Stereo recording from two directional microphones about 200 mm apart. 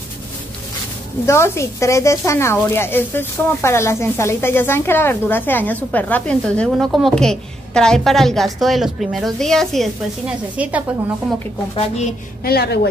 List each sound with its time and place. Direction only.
1.2 s a woman's voice: 15° left (ahead or behind); by 10.8 s 5° right (ahead or behind)
11.7 s a woman's voice: 30° left (ahead or behind)
12.4 s a woman's voice: 50° left (ahead or behind)